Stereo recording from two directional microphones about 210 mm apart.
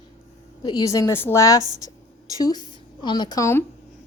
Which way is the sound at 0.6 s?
20° left (ahead or behind).